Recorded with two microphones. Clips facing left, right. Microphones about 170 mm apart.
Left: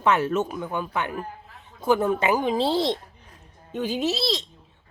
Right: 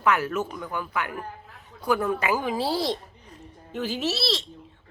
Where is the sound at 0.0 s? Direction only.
25° left (ahead or behind).